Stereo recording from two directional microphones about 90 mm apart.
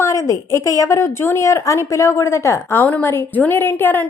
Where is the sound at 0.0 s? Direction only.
35° left (ahead or behind).